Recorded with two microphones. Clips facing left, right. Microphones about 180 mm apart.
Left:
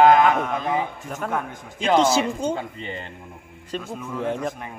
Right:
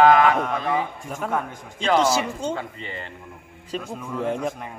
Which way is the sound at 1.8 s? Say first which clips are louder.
Left 2 dB; 20° left (ahead or behind).